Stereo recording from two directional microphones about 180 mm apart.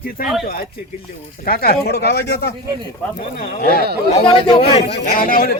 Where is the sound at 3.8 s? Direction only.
65° right (ahead or behind).